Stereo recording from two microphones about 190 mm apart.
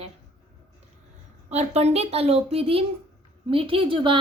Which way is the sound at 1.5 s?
35° right (ahead or behind).